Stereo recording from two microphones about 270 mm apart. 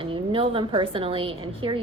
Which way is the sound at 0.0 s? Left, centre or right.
Centre.